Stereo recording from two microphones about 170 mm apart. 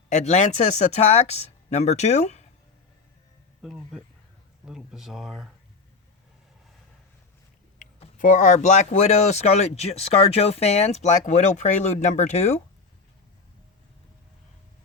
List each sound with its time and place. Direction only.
0.1 s speech: 40° left (ahead or behind)
3.6 s speech: centre (ahead or behind)
8.2 s speech: 50° left (ahead or behind)